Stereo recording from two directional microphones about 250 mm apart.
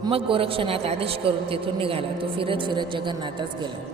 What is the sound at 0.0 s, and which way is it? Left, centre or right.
A man's voice, right.